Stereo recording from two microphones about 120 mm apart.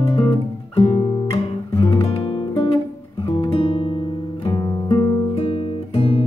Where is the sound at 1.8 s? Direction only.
50° left (ahead or behind).